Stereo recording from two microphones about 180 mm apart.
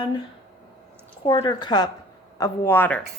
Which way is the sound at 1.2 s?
25° left (ahead or behind).